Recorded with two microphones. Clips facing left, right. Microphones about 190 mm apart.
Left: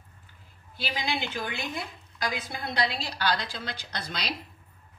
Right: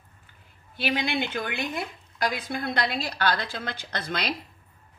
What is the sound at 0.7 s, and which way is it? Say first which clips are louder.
A woman's voice: right 5 dB; 60° right (ahead or behind).